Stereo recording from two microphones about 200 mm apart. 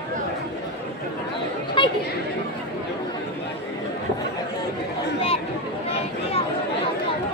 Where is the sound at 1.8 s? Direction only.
25° left (ahead or behind).